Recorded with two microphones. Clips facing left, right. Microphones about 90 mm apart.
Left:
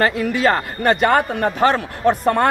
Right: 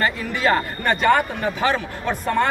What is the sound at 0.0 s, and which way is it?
Speech, 65° left (ahead or behind).